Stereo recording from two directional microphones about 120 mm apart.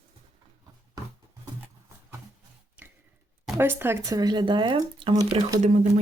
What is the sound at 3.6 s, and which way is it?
Speech, 20° right (ahead or behind).